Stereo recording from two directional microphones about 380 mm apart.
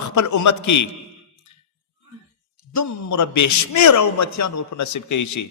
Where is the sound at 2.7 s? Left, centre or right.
Left.